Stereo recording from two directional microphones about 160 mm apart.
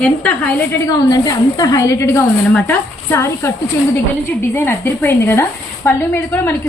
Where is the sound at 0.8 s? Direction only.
25° left (ahead or behind).